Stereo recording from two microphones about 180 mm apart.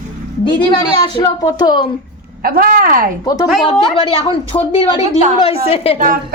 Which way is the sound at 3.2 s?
20° left (ahead or behind).